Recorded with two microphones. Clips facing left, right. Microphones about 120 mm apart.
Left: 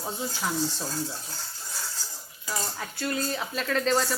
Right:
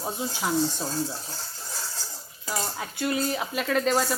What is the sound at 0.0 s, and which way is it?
Speech, 20° right (ahead or behind).